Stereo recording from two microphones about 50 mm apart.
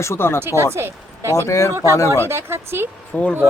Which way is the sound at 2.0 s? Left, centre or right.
Right.